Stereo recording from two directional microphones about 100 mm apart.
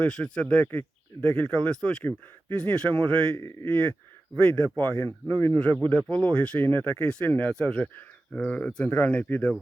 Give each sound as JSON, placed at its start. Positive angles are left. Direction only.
{"t": 0.0, "sound": "speech", "side_deg": 10}
{"t": 3.3, "sound": "speech", "side_deg": 30}
{"t": 3.7, "sound": "speech", "side_deg": 15}